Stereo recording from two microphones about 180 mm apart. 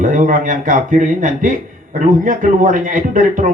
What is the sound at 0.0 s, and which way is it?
Speech, 45° right (ahead or behind).